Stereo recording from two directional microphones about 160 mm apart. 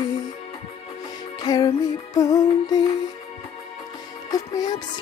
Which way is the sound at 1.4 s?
25° left (ahead or behind).